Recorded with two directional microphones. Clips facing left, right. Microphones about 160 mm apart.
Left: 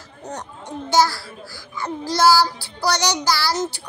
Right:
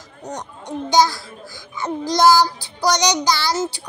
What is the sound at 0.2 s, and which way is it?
A child's voice, 15° right (ahead or behind).